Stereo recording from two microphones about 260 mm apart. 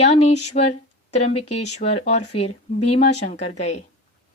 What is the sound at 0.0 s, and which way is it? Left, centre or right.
Speech, left.